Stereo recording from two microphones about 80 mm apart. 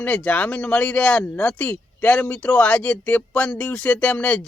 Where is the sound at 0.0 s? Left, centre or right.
Centre.